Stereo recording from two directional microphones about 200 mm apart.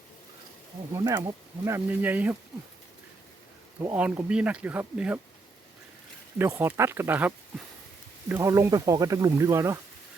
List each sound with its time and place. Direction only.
0.9 s speech: 15° right (ahead or behind)
3.8 s speech: 10° right (ahead or behind)
6.4 s speech: 10° right (ahead or behind)